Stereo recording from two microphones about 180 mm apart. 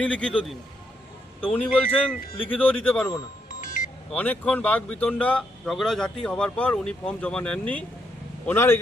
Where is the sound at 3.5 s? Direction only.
50° left (ahead or behind).